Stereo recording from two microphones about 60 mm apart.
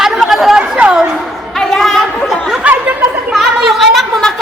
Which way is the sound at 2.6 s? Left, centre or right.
Right.